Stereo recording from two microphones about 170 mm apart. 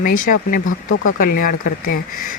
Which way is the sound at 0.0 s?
55° left (ahead or behind).